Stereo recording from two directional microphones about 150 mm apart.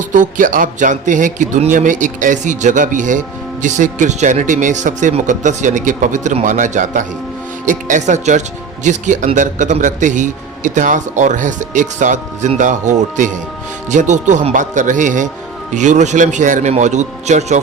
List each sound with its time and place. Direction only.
0.1 s a man's voice: 60° right (ahead or behind)